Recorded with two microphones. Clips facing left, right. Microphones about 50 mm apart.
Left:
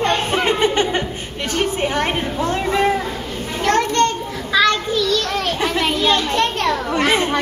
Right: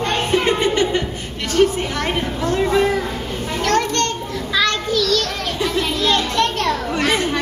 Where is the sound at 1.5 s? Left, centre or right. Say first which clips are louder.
Right 3 dB; left.